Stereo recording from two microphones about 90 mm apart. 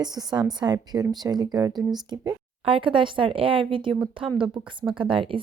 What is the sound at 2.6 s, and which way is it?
A woman's voice, 75° right (ahead or behind).